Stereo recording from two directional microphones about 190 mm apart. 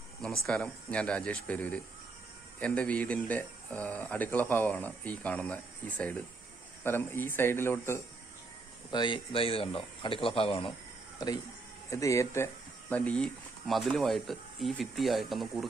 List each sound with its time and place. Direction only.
0.4 s speech: 5° left (ahead or behind)
8.9 s speech: 25° left (ahead or behind); by 15.6 s centre (ahead or behind)